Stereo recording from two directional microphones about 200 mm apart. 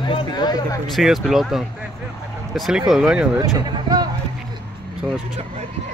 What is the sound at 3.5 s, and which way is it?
Speech, 20° right (ahead or behind).